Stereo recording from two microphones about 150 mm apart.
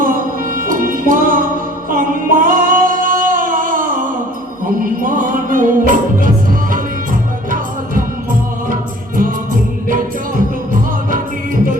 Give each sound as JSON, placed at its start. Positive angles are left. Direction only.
{"t": 0.0, "sound": "music", "side_deg": -65}
{"t": 1.9, "sound": "singing", "side_deg": -65}
{"t": 5.0, "sound": "music", "side_deg": -60}